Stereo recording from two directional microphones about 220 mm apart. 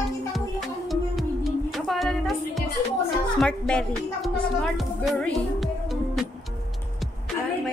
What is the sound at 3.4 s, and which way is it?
Speech, 5° left (ahead or behind).